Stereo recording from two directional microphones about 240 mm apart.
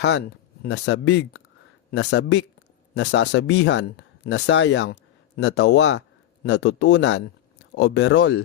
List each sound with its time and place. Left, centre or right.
0.0 s speech: left